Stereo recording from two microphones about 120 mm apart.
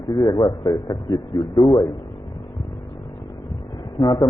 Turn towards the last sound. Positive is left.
turn(degrees=45)  # may be behind; listen again after turning